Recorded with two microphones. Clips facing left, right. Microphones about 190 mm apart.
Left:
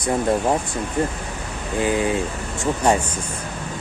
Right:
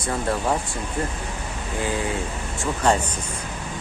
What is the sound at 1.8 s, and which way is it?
Speech, 20° left (ahead or behind).